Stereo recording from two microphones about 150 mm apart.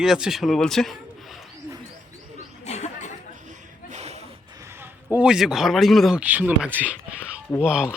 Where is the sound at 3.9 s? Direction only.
45° right (ahead or behind).